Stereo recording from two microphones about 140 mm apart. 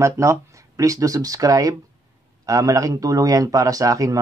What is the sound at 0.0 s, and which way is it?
Speech, 20° right (ahead or behind).